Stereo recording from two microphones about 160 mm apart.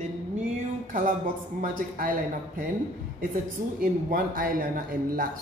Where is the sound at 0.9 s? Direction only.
55° right (ahead or behind).